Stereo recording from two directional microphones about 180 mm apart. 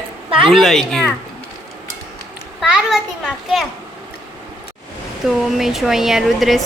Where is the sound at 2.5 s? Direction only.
5° right (ahead or behind).